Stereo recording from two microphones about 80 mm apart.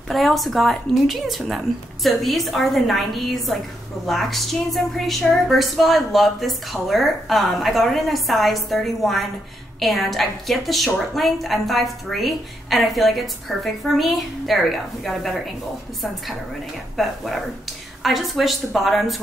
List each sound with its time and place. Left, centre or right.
0.1 s a woman's voice: centre
16.9 s a woman's voice: centre